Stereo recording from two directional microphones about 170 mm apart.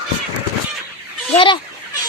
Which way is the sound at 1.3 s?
30° left (ahead or behind).